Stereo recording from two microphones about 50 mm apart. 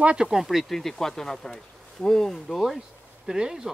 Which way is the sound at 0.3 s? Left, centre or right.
Centre.